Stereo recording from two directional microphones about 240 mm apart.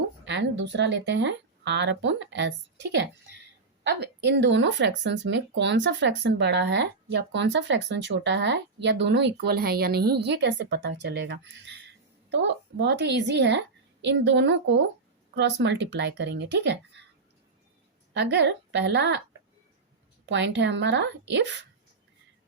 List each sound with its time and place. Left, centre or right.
0.3 s speech: right
18.1 s speech: right
20.2 s speech: right